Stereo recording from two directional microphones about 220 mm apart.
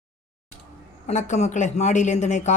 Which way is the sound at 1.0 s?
30° left (ahead or behind).